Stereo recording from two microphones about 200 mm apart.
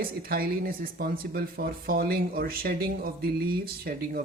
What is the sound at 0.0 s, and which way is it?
Speech, 50° right (ahead or behind).